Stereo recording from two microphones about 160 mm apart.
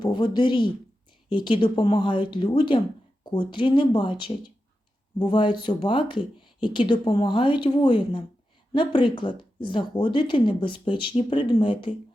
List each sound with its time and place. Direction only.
0.0 s speech: 30° left (ahead or behind)